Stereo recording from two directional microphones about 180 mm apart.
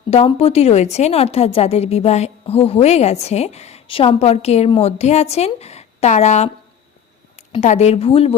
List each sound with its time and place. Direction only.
0.1 s a woman's voice: 35° left (ahead or behind)
7.5 s a woman's voice: 40° left (ahead or behind)